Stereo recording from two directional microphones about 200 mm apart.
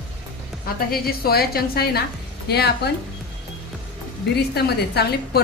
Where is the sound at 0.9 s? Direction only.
50° left (ahead or behind).